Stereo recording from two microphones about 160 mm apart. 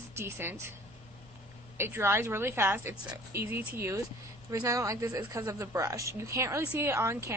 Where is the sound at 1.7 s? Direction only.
15° right (ahead or behind).